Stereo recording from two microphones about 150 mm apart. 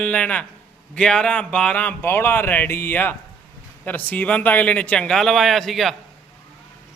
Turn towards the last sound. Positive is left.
turn(degrees=0)  # may be behind; listen again after turning